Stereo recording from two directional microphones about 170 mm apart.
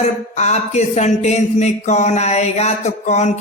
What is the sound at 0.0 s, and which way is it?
Speech, 40° left (ahead or behind).